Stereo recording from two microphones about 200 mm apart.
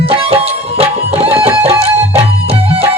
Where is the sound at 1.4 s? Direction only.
30° right (ahead or behind).